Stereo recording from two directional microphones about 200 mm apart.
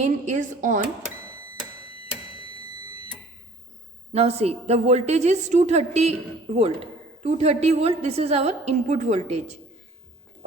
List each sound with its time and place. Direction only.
0.0 s a woman's voice: 35° right (ahead or behind)
4.1 s a woman's voice: 30° right (ahead or behind)